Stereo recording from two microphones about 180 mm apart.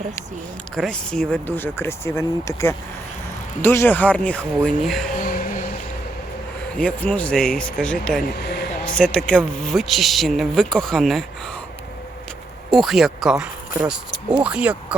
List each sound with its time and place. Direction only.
0.8 s speech: 5° left (ahead or behind)
5.1 s music: 50° left (ahead or behind)
6.7 s speech: 10° left (ahead or behind)
8.4 s speech: 65° left (ahead or behind)
9.0 s speech: 5° left (ahead or behind)
12.7 s speech: centre (ahead or behind)